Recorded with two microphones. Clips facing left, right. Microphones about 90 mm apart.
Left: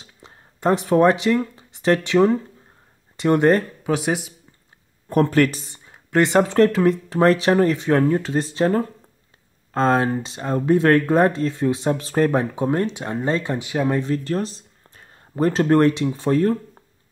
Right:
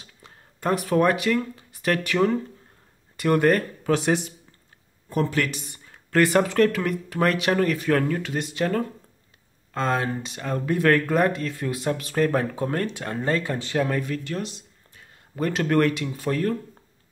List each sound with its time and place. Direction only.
0.0 s speech: 25° left (ahead or behind)
3.8 s speech: 10° left (ahead or behind)
5.1 s speech: 45° left (ahead or behind)
5.9 s speech: 20° left (ahead or behind)
13.9 s speech: 30° left (ahead or behind)